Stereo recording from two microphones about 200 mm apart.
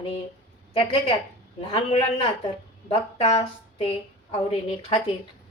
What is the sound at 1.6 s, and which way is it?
Speech, 25° left (ahead or behind).